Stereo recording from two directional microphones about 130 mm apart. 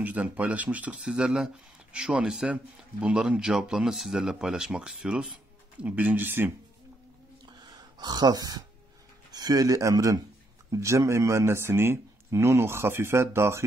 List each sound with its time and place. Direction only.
0.0 s speech: 10° right (ahead or behind)
7.6 s gasp: 30° right (ahead or behind)
9.3 s speech: 30° right (ahead or behind)